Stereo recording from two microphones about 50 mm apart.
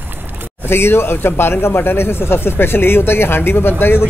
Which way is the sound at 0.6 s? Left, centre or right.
Left.